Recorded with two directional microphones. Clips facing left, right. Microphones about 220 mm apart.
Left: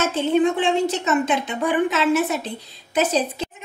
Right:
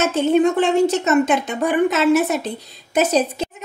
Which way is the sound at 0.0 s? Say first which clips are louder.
Right 3 dB; 45° right (ahead or behind).